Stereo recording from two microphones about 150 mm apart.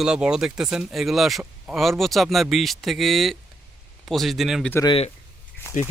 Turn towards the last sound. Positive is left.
turn(degrees=55)  # may be behind; listen again after turning